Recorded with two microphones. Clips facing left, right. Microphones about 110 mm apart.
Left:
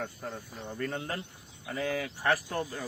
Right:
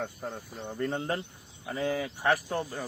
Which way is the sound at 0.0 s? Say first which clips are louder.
Right 2 dB; 15° right (ahead or behind).